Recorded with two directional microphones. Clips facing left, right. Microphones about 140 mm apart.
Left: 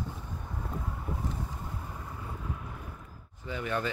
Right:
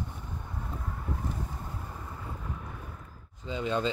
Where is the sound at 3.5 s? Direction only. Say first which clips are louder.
Right 2 dB; 20° right (ahead or behind).